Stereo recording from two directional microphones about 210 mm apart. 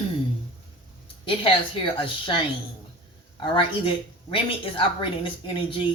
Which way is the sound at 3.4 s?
25° left (ahead or behind).